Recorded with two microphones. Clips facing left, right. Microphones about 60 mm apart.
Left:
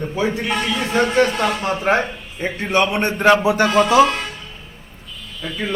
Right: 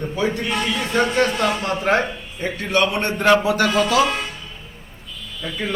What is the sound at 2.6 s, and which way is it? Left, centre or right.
Speech, left.